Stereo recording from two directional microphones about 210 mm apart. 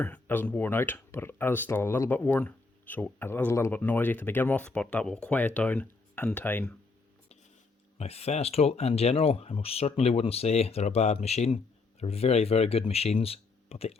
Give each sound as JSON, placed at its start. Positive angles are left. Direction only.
{"t": 0.0, "sound": "speech", "side_deg": 10}
{"t": 7.9, "sound": "speech", "side_deg": 30}